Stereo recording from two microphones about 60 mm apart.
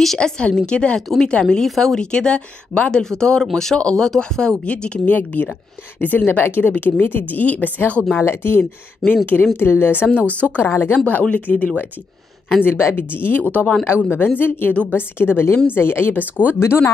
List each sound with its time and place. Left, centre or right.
0.0 s a woman's voice: centre
0.7 s speech: centre
5.1 s a woman's voice: left
8.2 s a woman's voice: left
9.0 s a woman's voice: left
10.6 s a woman's voice: left
11.1 s speech: left
12.6 s a woman's voice: left
14.7 s speech: left
15.0 s a woman's voice: left
16.5 s speech: left